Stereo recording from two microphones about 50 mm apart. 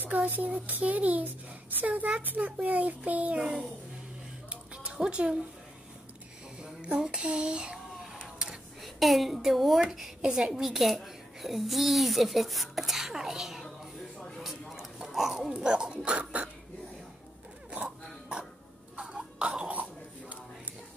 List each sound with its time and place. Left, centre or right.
0.0 s speech: right
4.8 s speech: centre
6.6 s a sound: centre
8.8 s a woman's voice: centre
13.7 s music: centre
14.4 s a sound: centre
15.5 s speech: centre
17.6 s a sound: centre
18.9 s throat clearing: centre
19.7 s dog: right